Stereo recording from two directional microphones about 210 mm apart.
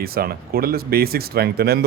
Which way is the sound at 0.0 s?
45° right (ahead or behind).